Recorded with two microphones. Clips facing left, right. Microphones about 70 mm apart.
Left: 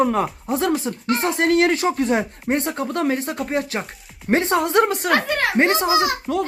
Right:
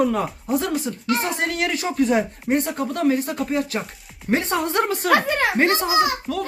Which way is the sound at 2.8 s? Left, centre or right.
Left.